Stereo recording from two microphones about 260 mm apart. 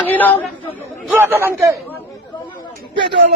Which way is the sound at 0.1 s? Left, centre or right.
Centre.